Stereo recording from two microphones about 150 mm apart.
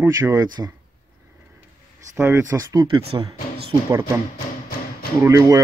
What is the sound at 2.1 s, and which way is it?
Speech, 15° right (ahead or behind).